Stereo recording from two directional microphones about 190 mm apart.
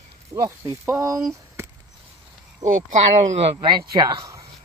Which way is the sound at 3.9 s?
20° right (ahead or behind).